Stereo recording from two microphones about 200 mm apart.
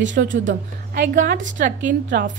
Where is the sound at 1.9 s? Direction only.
60° right (ahead or behind).